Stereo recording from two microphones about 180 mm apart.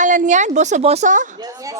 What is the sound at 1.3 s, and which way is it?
Speech, 20° right (ahead or behind).